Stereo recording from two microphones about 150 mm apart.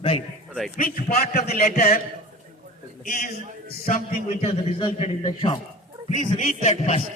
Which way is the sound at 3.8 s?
65° left (ahead or behind).